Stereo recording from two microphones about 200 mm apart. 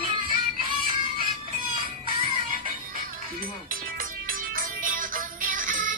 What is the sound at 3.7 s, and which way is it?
Music, 45° right (ahead or behind).